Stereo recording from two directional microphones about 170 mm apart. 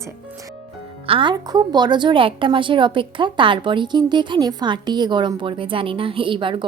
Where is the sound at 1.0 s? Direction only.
30° right (ahead or behind).